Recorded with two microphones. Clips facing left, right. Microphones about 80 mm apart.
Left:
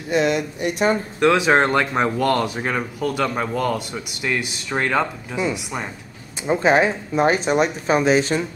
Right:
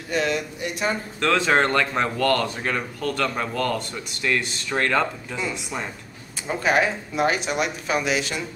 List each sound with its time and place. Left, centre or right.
0.1 s speech: left
6.4 s speech: left